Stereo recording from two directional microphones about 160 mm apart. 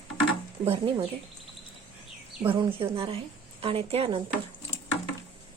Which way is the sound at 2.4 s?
35° right (ahead or behind).